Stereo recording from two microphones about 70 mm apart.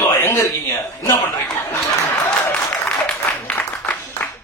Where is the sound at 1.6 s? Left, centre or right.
Left.